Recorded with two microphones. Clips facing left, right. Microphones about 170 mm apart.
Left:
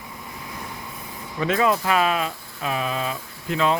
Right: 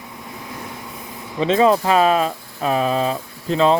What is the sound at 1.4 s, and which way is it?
Speech, 25° right (ahead or behind).